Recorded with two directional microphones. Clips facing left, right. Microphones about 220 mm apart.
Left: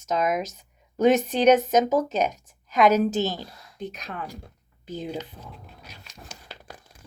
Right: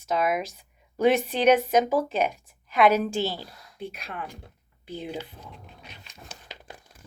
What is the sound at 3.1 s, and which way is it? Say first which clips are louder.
Speech: left 2 dB; 10° right (ahead or behind).